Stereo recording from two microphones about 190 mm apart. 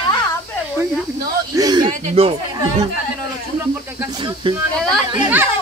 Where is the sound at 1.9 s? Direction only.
30° right (ahead or behind).